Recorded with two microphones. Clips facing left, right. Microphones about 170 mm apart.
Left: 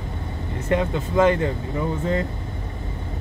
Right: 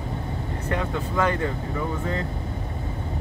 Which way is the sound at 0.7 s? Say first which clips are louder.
Left 6 dB; 20° left (ahead or behind).